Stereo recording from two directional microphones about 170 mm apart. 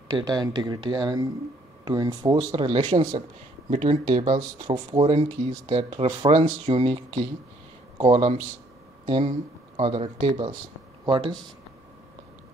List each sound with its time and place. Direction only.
0.1 s speech: 25° right (ahead or behind)